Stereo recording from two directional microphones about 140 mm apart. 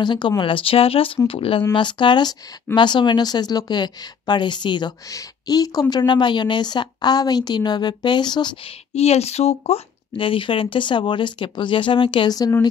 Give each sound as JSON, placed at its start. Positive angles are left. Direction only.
{"t": 0.0, "sound": "speech", "side_deg": 35}
{"t": 8.9, "sound": "speech", "side_deg": 50}